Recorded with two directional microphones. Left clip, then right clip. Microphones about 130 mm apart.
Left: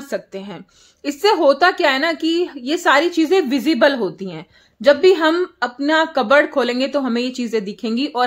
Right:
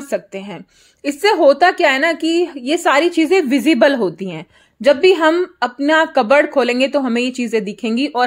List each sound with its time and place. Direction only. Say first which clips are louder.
0.1 s a woman's voice: right 4 dB; 20° right (ahead or behind)